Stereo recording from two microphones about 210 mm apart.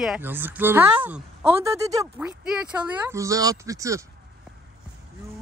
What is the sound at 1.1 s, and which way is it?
Speech, 10° right (ahead or behind).